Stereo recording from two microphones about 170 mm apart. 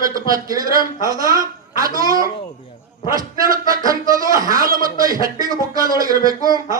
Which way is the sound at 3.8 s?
20° right (ahead or behind).